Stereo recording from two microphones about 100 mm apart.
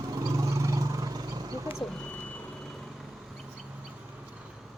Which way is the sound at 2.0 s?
15° left (ahead or behind).